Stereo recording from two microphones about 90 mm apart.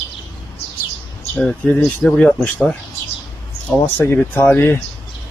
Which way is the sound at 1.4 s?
5° left (ahead or behind).